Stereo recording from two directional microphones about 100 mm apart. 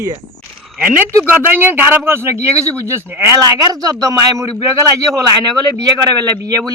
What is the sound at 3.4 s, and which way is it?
A man's voice, 35° right (ahead or behind).